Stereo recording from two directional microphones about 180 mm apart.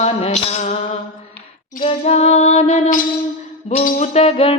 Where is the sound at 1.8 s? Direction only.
35° left (ahead or behind).